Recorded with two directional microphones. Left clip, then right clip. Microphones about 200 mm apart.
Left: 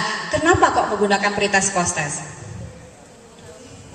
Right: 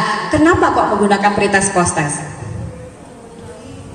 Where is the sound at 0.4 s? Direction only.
20° right (ahead or behind).